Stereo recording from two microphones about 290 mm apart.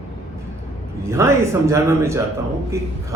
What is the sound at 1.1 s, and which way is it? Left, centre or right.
Speech, centre.